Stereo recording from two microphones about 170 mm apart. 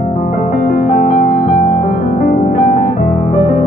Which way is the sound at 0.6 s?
55° left (ahead or behind).